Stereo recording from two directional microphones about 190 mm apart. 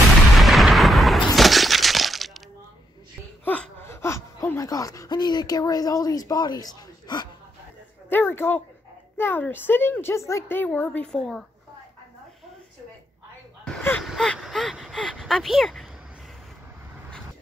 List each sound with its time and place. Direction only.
0.4 s breaking: centre (ahead or behind)
3.4 s speech: 10° left (ahead or behind)
8.1 s a woman's voice: 10° left (ahead or behind)
13.7 s speech: 5° left (ahead or behind)